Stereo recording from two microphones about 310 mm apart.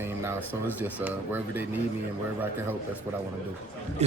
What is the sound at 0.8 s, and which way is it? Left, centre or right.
Speech, centre.